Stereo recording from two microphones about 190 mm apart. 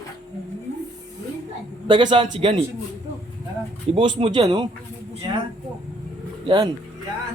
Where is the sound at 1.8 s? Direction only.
25° right (ahead or behind).